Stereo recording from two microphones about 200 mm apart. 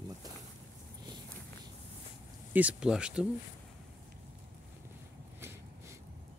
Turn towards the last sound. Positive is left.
turn(degrees=-10)  # may be behind; listen again after turning